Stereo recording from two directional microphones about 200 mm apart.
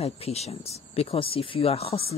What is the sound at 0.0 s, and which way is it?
A woman's voice, 30° left (ahead or behind).